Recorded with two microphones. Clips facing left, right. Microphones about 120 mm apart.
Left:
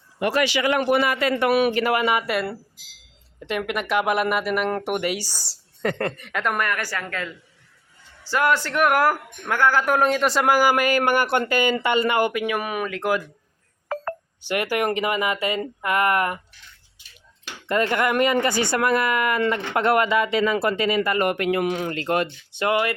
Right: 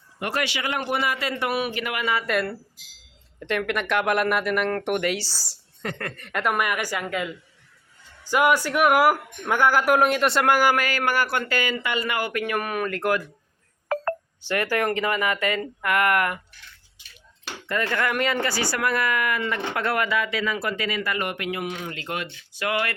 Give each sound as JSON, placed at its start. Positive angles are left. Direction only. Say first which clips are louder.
{"t": 0.7, "sound": "a man's voice", "louder": "left 5 dB", "side_deg": 80}
{"t": 1.7, "sound": "speech", "louder": "left 6 dB", "side_deg": 35}
{"t": 2.2, "sound": "speech", "louder": "even", "side_deg": 5}
{"t": 3.7, "sound": "speech", "louder": "left 2 dB", "side_deg": 5}
{"t": 6.1, "sound": "speech", "louder": "even", "side_deg": 0}
{"t": 10.8, "sound": "speech", "louder": "left 4 dB", "side_deg": 20}
{"t": 12.3, "sound": "speech", "louder": "left 1 dB", "side_deg": 10}
{"t": 13.8, "sound": "telephone dialing", "louder": "right 3 dB", "side_deg": -90}
{"t": 14.4, "sound": "speech", "louder": "left 1 dB", "side_deg": 15}
{"t": 17.7, "sound": "speech", "louder": "left 4 dB", "side_deg": 25}
{"t": 21.2, "sound": "speech", "louder": "left 7 dB", "side_deg": 45}
{"t": 21.6, "sound": "a man's voice", "louder": "left 7 dB", "side_deg": 60}
{"t": 21.9, "sound": "speech", "louder": "left 8 dB", "side_deg": 40}
{"t": 22.5, "sound": "speech", "louder": "left 4 dB", "side_deg": 25}